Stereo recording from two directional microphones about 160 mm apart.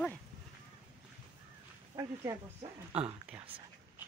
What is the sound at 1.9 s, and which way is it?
Speech, 20° right (ahead or behind).